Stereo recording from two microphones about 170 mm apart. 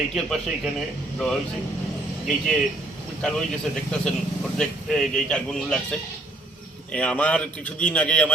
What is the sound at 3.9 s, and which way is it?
A man's voice, 5° left (ahead or behind).